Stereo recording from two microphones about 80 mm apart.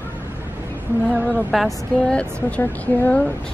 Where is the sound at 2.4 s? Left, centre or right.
Centre.